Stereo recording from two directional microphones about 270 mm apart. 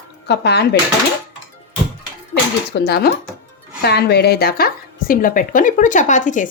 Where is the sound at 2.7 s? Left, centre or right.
Left.